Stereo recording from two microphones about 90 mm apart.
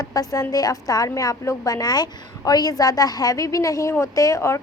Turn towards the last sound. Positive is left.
turn(degrees=35)  # may be behind; listen again after turning